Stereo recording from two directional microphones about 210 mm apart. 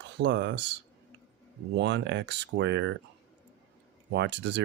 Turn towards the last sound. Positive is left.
turn(degrees=-55)  # may be behind; listen again after turning